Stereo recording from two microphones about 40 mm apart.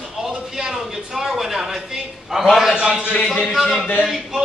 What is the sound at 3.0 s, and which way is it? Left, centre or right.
Speech, right.